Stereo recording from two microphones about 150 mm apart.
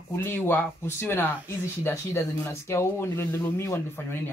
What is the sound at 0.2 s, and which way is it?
Speech, 15° left (ahead or behind).